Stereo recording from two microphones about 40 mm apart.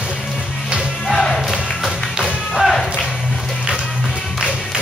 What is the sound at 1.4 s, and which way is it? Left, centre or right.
Music, centre.